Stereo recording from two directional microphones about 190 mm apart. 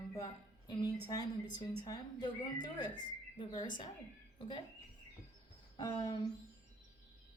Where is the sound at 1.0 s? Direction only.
20° left (ahead or behind).